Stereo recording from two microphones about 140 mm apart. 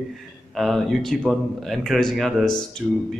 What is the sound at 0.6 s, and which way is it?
Speech, centre (ahead or behind).